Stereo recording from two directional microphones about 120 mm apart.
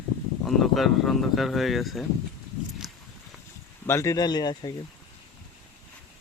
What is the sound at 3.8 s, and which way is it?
Speech, 20° left (ahead or behind).